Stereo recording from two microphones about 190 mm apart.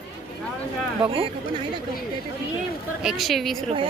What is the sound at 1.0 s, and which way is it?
Speech, 30° right (ahead or behind).